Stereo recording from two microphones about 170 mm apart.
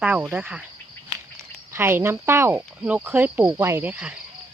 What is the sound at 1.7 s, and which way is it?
Speech, 15° right (ahead or behind).